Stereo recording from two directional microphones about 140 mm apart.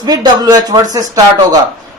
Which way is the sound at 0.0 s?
30° right (ahead or behind).